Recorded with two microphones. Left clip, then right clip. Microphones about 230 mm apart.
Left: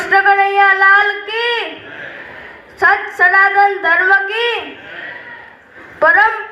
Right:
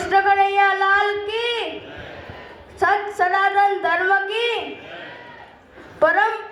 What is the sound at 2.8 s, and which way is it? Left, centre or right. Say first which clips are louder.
Speech: left 7 dB; right.